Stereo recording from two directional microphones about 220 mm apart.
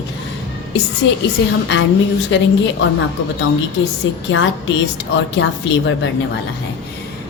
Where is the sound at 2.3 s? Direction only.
55° left (ahead or behind).